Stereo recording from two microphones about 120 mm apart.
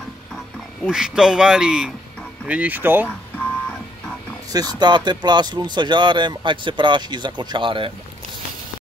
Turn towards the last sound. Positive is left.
turn(degrees=-45)  # may be behind; listen again after turning